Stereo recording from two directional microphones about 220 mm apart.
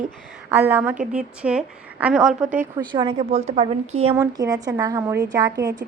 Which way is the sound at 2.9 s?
20° right (ahead or behind).